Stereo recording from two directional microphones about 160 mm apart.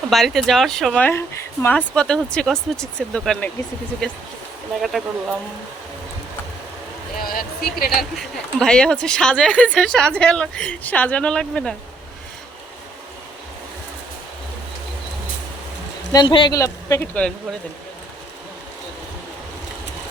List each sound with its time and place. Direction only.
0.1 s a woman's voice: centre (ahead or behind)
7.2 s speech: 65° left (ahead or behind)
7.9 s a woman's voice: centre (ahead or behind)
16.1 s speech: 30° left (ahead or behind)
16.6 s speech: 20° left (ahead or behind)